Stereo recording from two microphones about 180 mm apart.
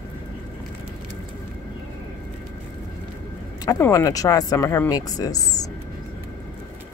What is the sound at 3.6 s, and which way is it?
Speech, 15° left (ahead or behind).